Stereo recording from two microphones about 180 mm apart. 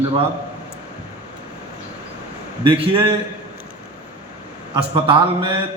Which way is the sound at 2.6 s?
25° right (ahead or behind).